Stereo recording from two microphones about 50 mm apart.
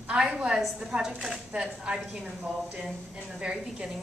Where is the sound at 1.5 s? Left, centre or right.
Right.